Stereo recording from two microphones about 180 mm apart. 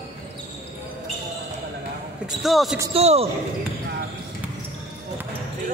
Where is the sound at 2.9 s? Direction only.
35° right (ahead or behind).